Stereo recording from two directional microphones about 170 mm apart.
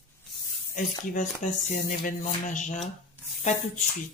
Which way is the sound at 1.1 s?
50° left (ahead or behind).